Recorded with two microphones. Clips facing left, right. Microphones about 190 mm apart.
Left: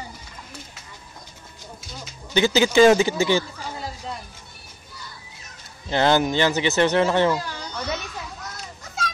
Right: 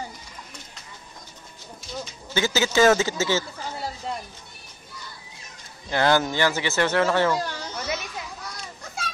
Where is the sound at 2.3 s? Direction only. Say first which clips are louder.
Left 5 dB; 15° left (ahead or behind).